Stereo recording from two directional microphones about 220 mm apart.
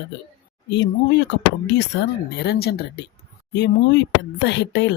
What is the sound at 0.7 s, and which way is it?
Speech, 55° left (ahead or behind).